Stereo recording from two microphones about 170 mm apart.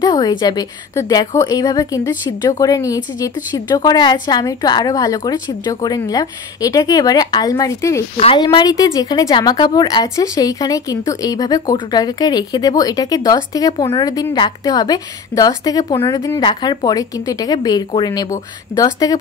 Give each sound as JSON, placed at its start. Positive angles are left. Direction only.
{"t": 0.0, "sound": "a woman's voice", "side_deg": 25}
{"t": 8.2, "sound": "a woman's voice", "side_deg": 30}